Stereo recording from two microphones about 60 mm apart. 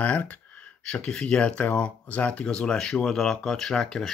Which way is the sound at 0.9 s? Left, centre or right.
Centre.